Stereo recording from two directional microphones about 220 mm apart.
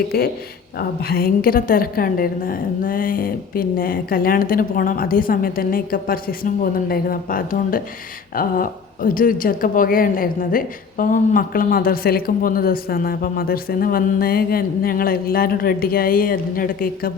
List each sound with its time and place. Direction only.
0.1 s speech: 45° left (ahead or behind)